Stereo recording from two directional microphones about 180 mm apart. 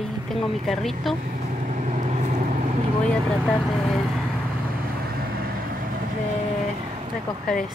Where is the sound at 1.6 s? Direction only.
40° right (ahead or behind).